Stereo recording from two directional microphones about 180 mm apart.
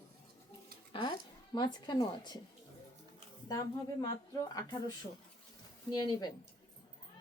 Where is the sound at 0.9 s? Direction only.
25° left (ahead or behind).